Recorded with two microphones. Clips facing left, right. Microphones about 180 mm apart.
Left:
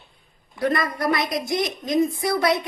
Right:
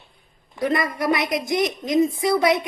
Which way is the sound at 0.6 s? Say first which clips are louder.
Right 1 dB; 15° right (ahead or behind).